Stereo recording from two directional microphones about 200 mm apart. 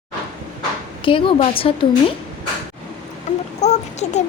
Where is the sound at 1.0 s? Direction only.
25° left (ahead or behind).